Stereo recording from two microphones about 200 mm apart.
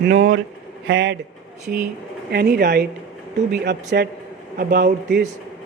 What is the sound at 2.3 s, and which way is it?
Speech, 55° right (ahead or behind).